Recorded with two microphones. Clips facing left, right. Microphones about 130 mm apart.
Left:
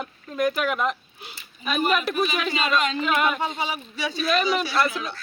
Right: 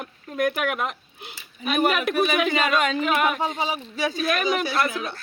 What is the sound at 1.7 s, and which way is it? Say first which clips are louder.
A man's voice: right 2 dB; 60° right (ahead or behind).